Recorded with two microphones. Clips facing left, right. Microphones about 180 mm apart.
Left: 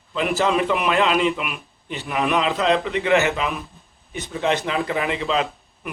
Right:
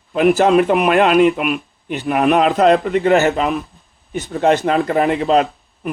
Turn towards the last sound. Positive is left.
turn(degrees=-40)  # may be behind; listen again after turning